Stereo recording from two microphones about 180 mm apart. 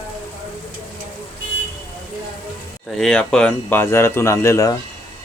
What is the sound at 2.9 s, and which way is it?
Speech, 5° left (ahead or behind).